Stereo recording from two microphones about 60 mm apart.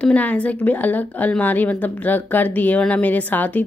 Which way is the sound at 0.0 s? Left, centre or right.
Left.